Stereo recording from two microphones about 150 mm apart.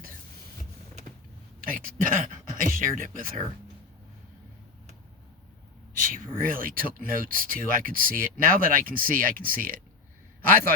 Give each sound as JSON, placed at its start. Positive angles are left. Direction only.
{"t": 1.6, "sound": "speech", "side_deg": -70}
{"t": 6.0, "sound": "speech", "side_deg": -70}